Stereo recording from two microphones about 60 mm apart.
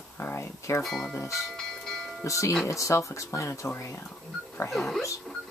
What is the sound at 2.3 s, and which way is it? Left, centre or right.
Speech, left.